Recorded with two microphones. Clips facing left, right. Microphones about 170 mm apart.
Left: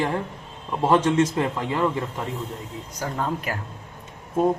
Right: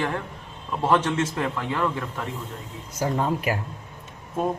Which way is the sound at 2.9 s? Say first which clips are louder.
Right 3 dB; 10° right (ahead or behind).